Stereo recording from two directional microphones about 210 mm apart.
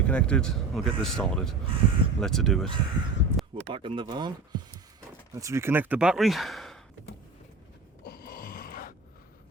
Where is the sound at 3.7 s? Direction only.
25° right (ahead or behind).